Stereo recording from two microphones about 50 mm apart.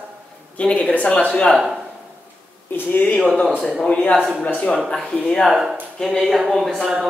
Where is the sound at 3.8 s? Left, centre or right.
Left.